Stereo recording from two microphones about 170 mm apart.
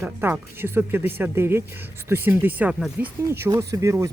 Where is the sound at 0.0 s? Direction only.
15° right (ahead or behind).